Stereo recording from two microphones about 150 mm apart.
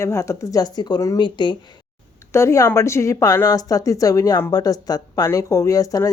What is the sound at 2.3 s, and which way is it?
A woman's voice, 20° left (ahead or behind).